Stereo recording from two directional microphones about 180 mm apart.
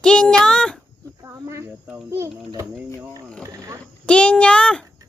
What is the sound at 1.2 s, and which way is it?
A child's voice, 15° right (ahead or behind).